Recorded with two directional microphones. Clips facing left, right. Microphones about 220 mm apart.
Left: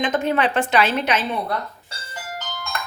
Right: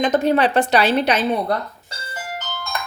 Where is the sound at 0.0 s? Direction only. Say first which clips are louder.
Right 4 dB; 40° right (ahead or behind).